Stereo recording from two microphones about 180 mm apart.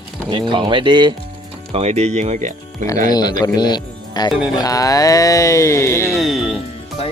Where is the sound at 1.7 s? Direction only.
35° right (ahead or behind).